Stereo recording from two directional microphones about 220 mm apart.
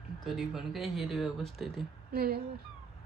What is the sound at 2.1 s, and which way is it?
Speech, 45° right (ahead or behind).